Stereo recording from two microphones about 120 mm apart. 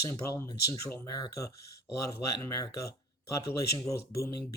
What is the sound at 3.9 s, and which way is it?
Speech, 25° left (ahead or behind).